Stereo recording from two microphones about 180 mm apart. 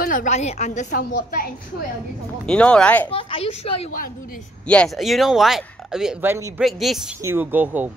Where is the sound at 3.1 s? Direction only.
30° left (ahead or behind).